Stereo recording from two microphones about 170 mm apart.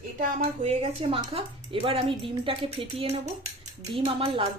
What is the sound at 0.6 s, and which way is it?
Speech, 35° right (ahead or behind).